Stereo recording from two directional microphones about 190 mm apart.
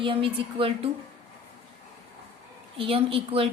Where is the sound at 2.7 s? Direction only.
30° right (ahead or behind).